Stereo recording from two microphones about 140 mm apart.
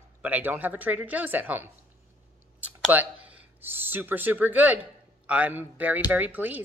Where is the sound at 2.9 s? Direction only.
10° right (ahead or behind).